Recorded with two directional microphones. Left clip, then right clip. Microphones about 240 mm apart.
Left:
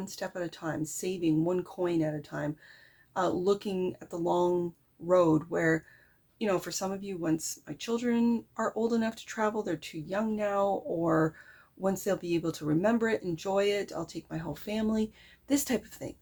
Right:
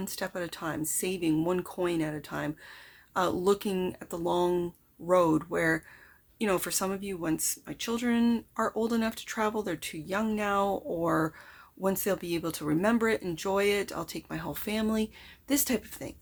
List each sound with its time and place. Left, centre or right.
0.0 s speech: centre